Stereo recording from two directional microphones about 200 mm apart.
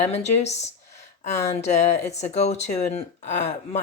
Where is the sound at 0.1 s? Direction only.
35° left (ahead or behind).